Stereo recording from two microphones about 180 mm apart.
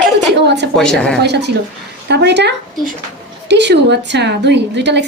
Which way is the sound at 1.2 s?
70° right (ahead or behind).